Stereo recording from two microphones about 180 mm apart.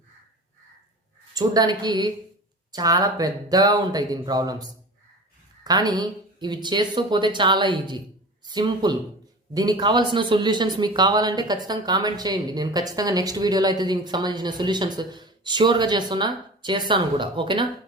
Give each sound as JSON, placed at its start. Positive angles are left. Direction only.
{"t": 1.3, "sound": "speech", "side_deg": -20}